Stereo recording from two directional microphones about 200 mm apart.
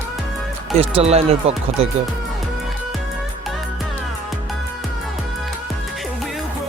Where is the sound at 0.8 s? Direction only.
30° right (ahead or behind).